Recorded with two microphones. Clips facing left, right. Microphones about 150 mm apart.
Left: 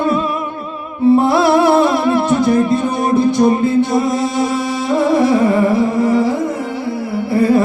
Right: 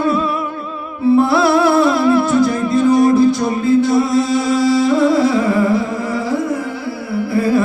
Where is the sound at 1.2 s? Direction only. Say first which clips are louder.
Left 1 dB; 20° left (ahead or behind).